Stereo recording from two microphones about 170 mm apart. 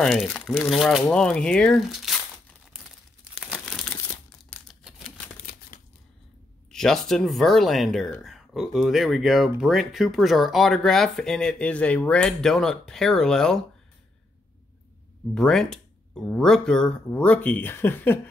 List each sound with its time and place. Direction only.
0.0 s speech: centre (ahead or behind)
3.3 s crumpling: 5° right (ahead or behind)
4.5 s typewriter: 10° left (ahead or behind)
5.7 s scissors: 50° left (ahead or behind)
6.7 s speech: 5° left (ahead or behind)
15.3 s speech: 5° left (ahead or behind)